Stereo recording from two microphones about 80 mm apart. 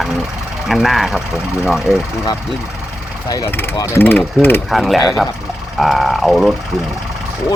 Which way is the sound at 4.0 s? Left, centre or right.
Left.